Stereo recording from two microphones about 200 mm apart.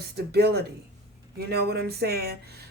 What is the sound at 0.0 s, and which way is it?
Speech, 55° right (ahead or behind).